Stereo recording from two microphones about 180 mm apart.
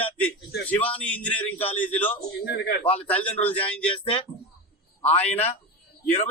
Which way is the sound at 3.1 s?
10° left (ahead or behind).